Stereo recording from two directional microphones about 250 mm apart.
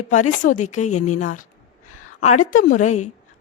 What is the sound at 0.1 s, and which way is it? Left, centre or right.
A woman's voice, left.